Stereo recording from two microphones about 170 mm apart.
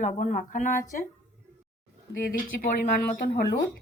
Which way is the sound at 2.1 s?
55° left (ahead or behind).